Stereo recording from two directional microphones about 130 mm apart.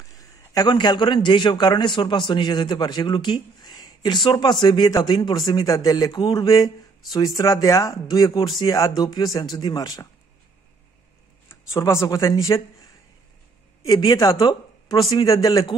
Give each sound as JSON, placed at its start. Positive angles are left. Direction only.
{"t": 0.0, "sound": "a man's voice", "side_deg": 25}
{"t": 11.4, "sound": "speech", "side_deg": 20}
{"t": 13.8, "sound": "speech", "side_deg": 30}